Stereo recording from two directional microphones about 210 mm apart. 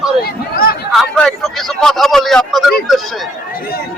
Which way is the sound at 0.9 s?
Centre (ahead or behind).